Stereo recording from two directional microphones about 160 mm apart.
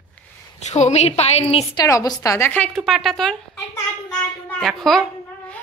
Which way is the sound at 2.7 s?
Centre (ahead or behind).